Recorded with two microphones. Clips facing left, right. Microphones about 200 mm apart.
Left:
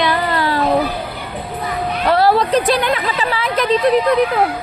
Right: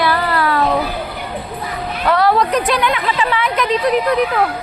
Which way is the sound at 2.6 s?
35° left (ahead or behind).